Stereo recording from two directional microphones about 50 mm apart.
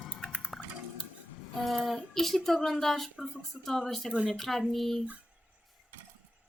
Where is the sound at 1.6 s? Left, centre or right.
Centre.